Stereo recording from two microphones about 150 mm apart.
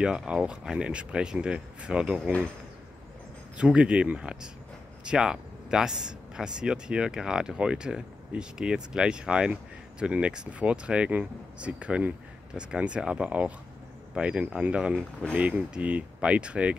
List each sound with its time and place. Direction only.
0.0 s speech: 5° right (ahead or behind)
3.5 s speech: 5° right (ahead or behind)